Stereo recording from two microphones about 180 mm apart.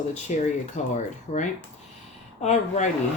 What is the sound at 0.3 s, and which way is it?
Speech, 45° left (ahead or behind).